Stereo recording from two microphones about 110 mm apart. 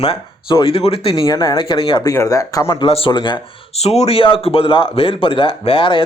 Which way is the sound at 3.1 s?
45° left (ahead or behind).